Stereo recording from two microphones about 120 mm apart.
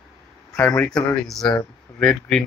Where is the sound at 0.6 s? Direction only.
10° left (ahead or behind).